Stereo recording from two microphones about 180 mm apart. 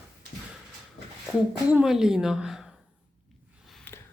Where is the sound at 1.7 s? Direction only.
5° right (ahead or behind).